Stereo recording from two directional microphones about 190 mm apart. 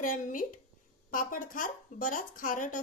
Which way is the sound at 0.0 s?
45° left (ahead or behind).